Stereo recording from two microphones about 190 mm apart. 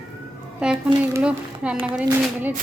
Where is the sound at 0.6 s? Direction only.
5° right (ahead or behind).